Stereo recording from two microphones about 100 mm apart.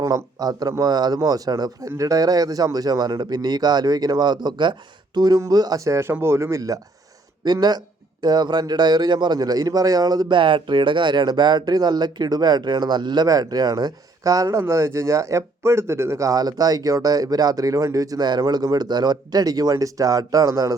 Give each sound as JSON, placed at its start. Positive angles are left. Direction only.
{"t": 0.0, "sound": "a man's voice", "side_deg": -35}